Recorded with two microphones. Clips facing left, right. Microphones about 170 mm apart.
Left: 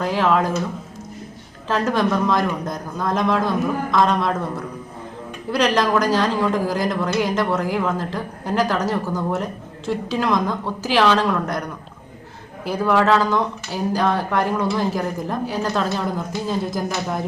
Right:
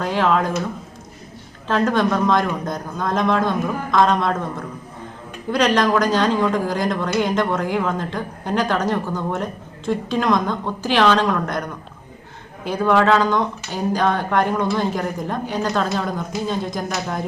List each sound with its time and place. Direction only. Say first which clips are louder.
0.0 s a woman's voice: even; centre (ahead or behind)
1.6 s a woman's voice: right 1 dB; 5° left (ahead or behind)
5.5 s a woman's voice: right 1 dB; centre (ahead or behind)
12.6 s a woman's voice: right 1 dB; 5° left (ahead or behind)